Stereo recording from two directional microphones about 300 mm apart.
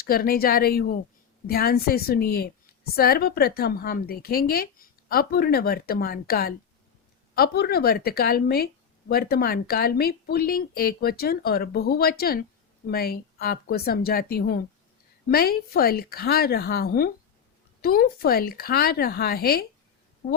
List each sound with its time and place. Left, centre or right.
0.1 s a woman's voice: left